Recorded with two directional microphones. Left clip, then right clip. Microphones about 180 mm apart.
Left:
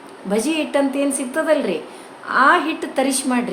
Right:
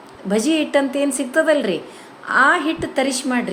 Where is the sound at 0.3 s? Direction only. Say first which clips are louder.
Right 2 dB; 25° right (ahead or behind).